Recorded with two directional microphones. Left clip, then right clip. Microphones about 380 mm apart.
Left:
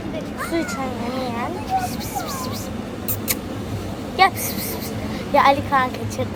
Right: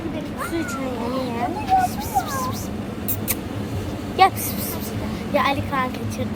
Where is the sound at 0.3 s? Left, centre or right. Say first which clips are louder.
Left 3 dB; centre.